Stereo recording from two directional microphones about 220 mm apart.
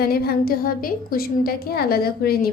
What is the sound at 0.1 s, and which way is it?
A woman's voice, 45° left (ahead or behind).